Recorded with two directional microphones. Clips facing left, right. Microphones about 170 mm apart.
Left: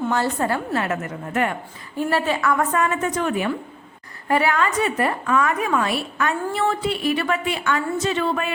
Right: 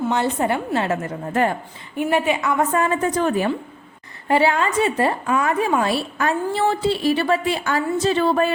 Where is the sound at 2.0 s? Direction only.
15° right (ahead or behind).